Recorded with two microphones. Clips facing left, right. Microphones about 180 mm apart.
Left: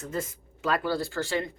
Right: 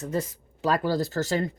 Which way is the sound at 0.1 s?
35° right (ahead or behind).